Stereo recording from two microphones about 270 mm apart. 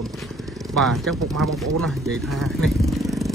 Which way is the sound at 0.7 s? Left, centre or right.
Centre.